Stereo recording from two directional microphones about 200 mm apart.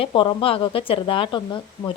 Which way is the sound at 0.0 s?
25° left (ahead or behind).